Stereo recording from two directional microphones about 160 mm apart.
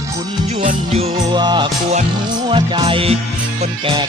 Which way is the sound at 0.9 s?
30° right (ahead or behind).